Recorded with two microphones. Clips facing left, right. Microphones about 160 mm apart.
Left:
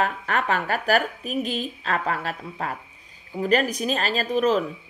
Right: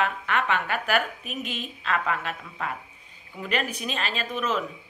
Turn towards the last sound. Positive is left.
turn(degrees=35)  # may be behind; listen again after turning